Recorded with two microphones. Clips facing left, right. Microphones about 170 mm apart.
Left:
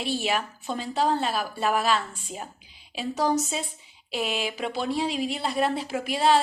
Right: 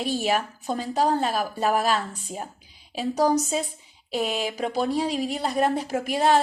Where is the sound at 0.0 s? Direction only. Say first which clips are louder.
Right 3 dB; 45° right (ahead or behind).